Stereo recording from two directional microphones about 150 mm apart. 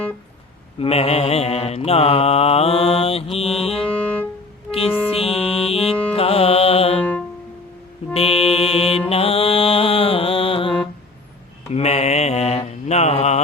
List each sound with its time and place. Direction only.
0.8 s mantra: 40° left (ahead or behind)
3.3 s music: 40° left (ahead or behind)
3.9 s music: 10° left (ahead or behind)
5.1 s music: 40° left (ahead or behind)
7.0 s music: 10° left (ahead or behind)
8.1 s music: 40° left (ahead or behind)
11.7 s mantra: 45° left (ahead or behind)